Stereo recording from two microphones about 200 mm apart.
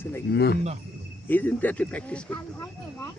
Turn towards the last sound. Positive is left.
turn(degrees=10)  # may be behind; listen again after turning